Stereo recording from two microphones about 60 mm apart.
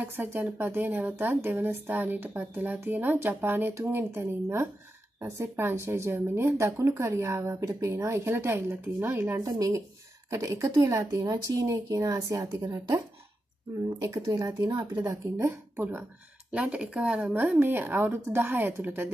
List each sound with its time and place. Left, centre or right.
0.0 s speech: right
9.4 s speech: right
10.3 s speech: right
13.8 s speech: right
15.7 s speech: right
16.5 s speech: centre
17.6 s speech: right